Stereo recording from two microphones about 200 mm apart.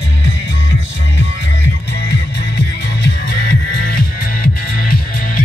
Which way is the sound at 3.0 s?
55° left (ahead or behind).